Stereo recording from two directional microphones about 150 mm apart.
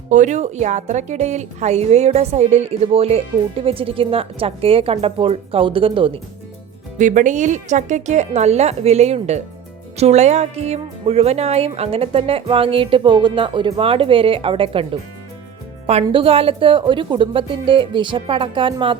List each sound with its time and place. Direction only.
0.1 s speech: 55° right (ahead or behind); by 6.1 s 35° right (ahead or behind)
7.0 s speech: 55° right (ahead or behind); by 14.8 s 35° right (ahead or behind)
16.0 s speech: 35° right (ahead or behind)